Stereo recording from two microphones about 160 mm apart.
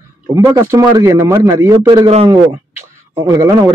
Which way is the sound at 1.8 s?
30° right (ahead or behind).